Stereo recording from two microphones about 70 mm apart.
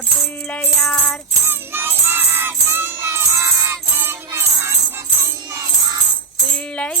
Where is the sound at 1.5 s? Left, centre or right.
Right.